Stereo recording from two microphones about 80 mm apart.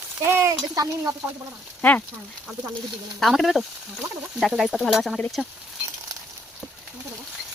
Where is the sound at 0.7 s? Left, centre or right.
Right.